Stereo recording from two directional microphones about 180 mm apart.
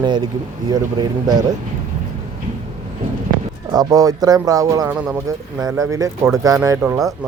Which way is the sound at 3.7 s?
20° right (ahead or behind).